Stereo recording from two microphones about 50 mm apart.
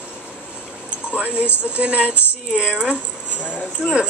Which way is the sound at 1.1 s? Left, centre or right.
Right.